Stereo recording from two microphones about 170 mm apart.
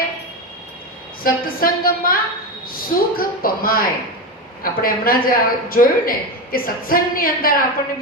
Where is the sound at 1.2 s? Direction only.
60° left (ahead or behind).